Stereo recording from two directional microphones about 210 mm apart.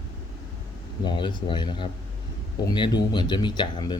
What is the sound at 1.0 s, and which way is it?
Speech, 20° left (ahead or behind).